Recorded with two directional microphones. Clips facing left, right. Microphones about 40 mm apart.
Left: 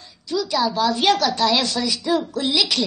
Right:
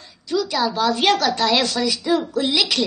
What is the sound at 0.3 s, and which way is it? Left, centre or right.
Speech, right.